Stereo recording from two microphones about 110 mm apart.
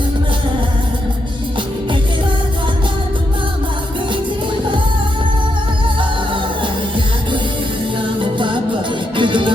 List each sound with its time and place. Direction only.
6.0 s music: 50° right (ahead or behind)
8.2 s music: 50° right (ahead or behind)